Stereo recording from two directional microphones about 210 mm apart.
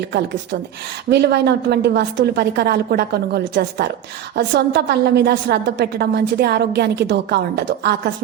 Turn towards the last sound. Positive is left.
turn(degrees=-50)  # may be behind; listen again after turning